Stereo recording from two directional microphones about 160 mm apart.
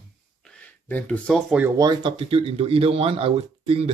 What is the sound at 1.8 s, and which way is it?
Speech, 30° right (ahead or behind).